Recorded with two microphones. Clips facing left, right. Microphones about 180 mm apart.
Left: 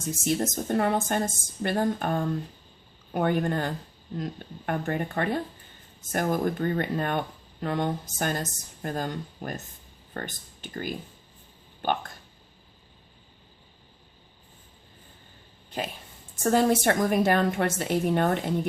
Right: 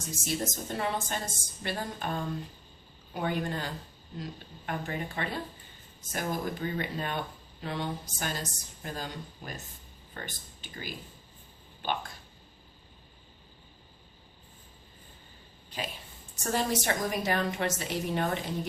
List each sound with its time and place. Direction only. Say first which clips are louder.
0.3 s a woman's voice: left 7 dB; 50° left (ahead or behind)
16.4 s a woman's voice: left 8 dB; 55° left (ahead or behind)